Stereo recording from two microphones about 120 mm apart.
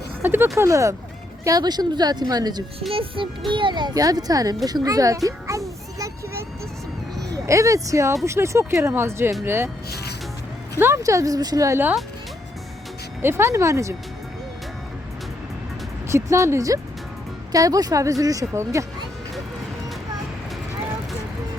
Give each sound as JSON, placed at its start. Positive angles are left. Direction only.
{"t": 0.2, "sound": "speech", "side_deg": -15}
{"t": 2.9, "sound": "music", "side_deg": -50}
{"t": 3.5, "sound": "a child's voice", "side_deg": -40}
{"t": 10.8, "sound": "speech", "side_deg": -20}
{"t": 13.2, "sound": "speech", "side_deg": -20}
{"t": 16.0, "sound": "speech", "side_deg": -25}